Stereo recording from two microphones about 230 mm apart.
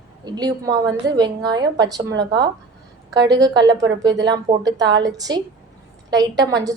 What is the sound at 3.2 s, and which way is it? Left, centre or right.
Speech, centre.